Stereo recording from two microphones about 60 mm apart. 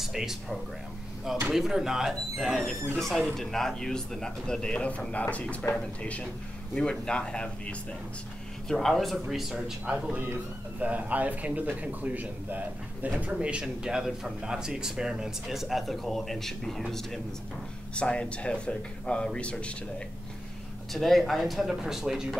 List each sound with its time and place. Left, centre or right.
0.0 s speech: centre; by 5.7 s left
6.7 s speech: centre
8.6 s speech: centre
9.8 s a man's voice: centre
13.3 s speech: centre
17.9 s speech: centre
20.9 s speech: centre